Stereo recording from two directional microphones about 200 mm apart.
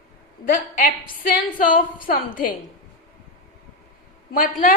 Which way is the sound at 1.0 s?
45° left (ahead or behind).